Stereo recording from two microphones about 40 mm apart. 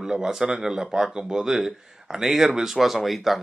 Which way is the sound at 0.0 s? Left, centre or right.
Centre.